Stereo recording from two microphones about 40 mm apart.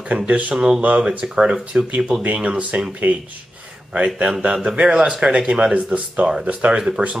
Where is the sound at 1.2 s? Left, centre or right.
Centre.